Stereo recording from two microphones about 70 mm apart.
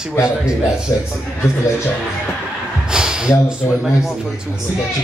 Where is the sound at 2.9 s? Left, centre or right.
Centre.